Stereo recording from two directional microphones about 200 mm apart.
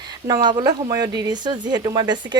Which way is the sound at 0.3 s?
20° right (ahead or behind).